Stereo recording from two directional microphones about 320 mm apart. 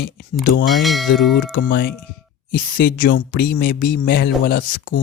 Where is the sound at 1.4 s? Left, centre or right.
Left.